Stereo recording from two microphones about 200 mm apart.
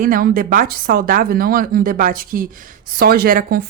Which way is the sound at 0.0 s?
45° right (ahead or behind).